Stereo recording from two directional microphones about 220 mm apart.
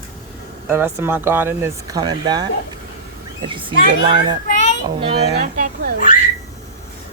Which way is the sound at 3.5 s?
25° right (ahead or behind).